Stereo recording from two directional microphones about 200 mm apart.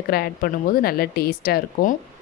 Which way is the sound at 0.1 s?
50° left (ahead or behind).